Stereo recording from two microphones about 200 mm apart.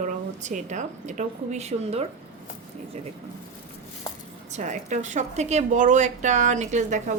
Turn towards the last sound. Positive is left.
turn(degrees=-35)  # may be behind; listen again after turning